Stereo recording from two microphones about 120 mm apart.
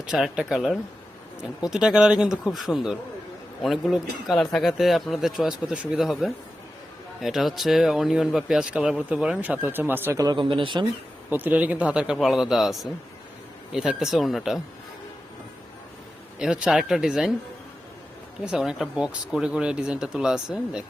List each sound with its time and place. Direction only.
0.0 s speech: 5° right (ahead or behind)
10.2 s speech: 30° right (ahead or behind)
10.5 s speech: 45° right (ahead or behind)
11.3 s a man's voice: 15° right (ahead or behind)
16.4 s a man's voice: 5° right (ahead or behind)
18.4 s speech: 5° right (ahead or behind)